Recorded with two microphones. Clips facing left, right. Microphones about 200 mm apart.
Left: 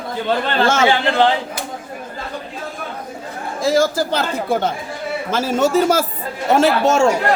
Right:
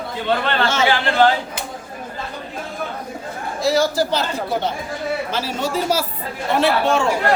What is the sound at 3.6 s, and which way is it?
Speech, 50° left (ahead or behind).